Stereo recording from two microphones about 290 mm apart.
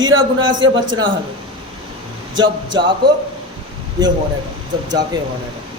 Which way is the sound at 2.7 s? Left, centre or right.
Centre.